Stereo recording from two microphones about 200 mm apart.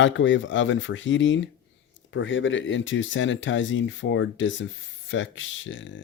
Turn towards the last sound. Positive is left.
turn(degrees=70)  # may be behind; listen again after turning